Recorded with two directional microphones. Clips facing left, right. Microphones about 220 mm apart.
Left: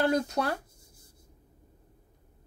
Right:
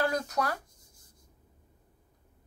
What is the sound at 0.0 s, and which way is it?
Speech, 25° left (ahead or behind).